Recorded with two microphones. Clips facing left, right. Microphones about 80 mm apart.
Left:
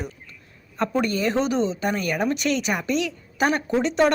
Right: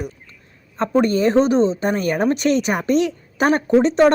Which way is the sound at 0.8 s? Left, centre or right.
Right.